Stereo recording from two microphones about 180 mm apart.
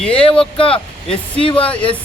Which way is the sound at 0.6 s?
30° left (ahead or behind).